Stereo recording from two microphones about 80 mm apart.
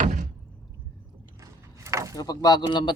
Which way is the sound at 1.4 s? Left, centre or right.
Right.